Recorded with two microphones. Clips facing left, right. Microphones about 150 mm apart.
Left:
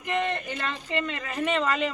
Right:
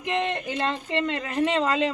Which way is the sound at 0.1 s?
25° right (ahead or behind).